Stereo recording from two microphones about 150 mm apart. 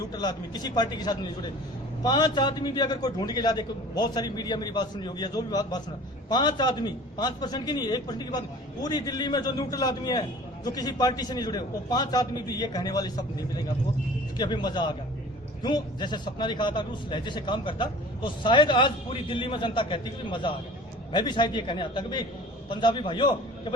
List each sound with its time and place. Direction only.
0.1 s a man's voice: 25° left (ahead or behind)
14.3 s a man's voice: 30° left (ahead or behind)